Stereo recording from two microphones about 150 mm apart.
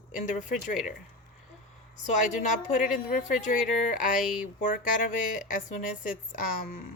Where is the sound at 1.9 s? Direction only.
55° left (ahead or behind).